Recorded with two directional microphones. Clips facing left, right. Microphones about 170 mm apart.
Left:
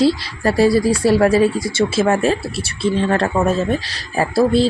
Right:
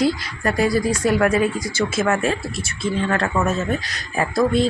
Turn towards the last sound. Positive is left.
turn(degrees=30)  # may be behind; listen again after turning